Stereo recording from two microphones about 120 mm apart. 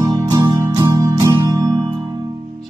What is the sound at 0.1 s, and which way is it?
Music, 35° right (ahead or behind).